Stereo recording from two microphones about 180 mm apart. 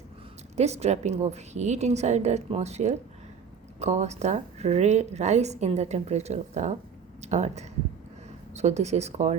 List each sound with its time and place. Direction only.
0.5 s speech: 35° right (ahead or behind)